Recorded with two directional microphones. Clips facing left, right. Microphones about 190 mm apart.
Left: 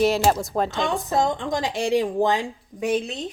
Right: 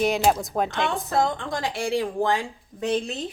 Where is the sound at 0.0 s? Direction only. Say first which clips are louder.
Left 2 dB; centre (ahead or behind).